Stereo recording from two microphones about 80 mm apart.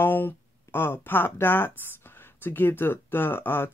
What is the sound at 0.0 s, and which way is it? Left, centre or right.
Speech, left.